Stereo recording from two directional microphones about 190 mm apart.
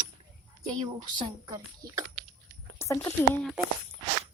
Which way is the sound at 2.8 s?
15° left (ahead or behind).